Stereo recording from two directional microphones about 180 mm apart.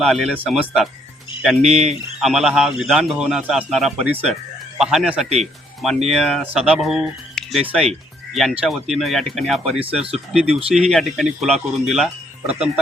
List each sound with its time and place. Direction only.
0.0 s speech: centre (ahead or behind)
9.8 s speech: 30° right (ahead or behind)
10.8 s speech: centre (ahead or behind)